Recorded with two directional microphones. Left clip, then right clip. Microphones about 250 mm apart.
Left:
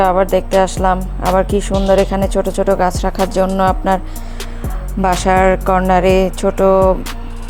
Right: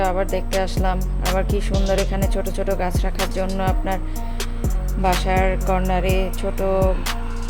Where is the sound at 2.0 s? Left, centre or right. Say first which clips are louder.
Left 9 dB; centre.